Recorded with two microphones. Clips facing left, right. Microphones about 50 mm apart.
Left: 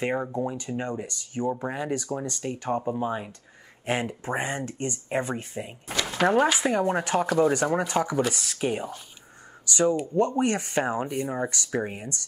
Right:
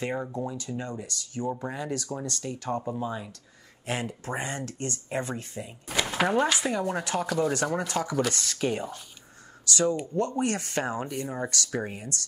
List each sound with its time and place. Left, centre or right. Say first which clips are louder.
0.0 s speech: left 4 dB; left
6.7 s speech: left 4 dB; left
7.2 s speech: left 4 dB; centre
8.2 s speech: left 1 dB; centre
9.7 s speech: left 3 dB; left